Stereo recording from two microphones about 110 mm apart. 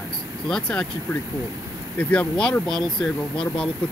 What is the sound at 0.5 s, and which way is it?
Speech, 5° left (ahead or behind).